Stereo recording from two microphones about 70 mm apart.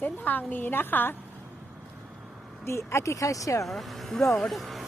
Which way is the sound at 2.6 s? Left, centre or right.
Left.